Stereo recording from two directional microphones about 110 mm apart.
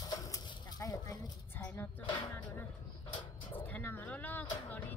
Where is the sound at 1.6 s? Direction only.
20° left (ahead or behind).